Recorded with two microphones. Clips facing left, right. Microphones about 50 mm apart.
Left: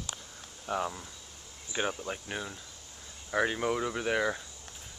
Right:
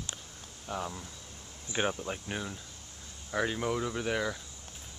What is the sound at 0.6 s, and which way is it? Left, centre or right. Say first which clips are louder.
Speech: left 4 dB; left.